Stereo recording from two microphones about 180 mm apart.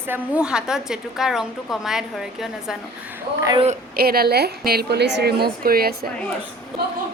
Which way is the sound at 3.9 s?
55° right (ahead or behind).